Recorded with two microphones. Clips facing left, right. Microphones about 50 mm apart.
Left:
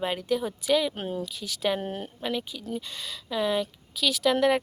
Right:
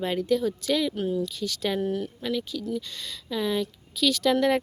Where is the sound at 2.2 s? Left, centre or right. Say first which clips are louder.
Right 2 dB; centre.